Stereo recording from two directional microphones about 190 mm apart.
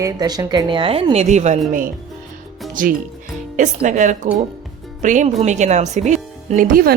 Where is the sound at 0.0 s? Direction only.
20° right (ahead or behind).